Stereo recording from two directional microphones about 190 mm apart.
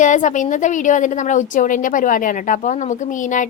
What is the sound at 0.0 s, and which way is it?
A woman's voice, 40° left (ahead or behind).